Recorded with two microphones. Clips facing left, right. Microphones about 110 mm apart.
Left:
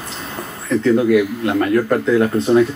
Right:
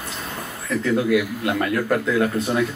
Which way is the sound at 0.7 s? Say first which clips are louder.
Left 6 dB; 30° left (ahead or behind).